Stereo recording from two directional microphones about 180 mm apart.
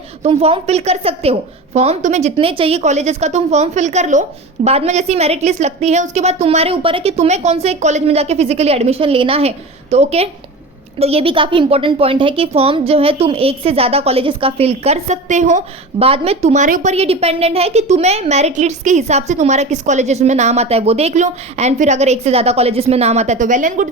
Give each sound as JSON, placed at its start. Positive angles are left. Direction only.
{"t": 0.2, "sound": "a woman's voice", "side_deg": -35}